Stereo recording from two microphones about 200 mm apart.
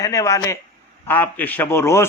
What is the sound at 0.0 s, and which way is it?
Speech, 15° left (ahead or behind).